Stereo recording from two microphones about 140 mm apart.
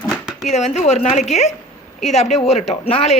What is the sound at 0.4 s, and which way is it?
A woman's voice, 50° left (ahead or behind).